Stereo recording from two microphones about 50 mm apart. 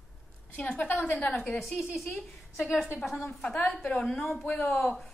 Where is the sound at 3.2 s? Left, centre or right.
Left.